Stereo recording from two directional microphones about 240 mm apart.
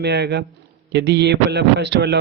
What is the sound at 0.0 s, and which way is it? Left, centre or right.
A man's voice, right.